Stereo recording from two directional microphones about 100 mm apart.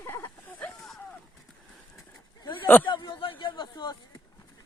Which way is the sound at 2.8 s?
50° left (ahead or behind).